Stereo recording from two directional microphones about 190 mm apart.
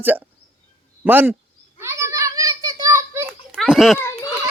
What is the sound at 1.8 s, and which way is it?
Children playing, 15° right (ahead or behind).